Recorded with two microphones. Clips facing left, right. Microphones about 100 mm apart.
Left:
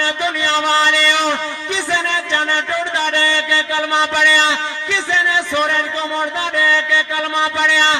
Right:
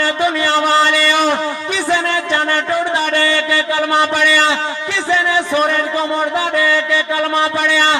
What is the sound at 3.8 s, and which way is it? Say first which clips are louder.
Music: right 4 dB; 20° right (ahead or behind).